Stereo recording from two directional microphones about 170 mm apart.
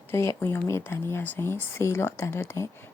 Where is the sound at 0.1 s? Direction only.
15° left (ahead or behind).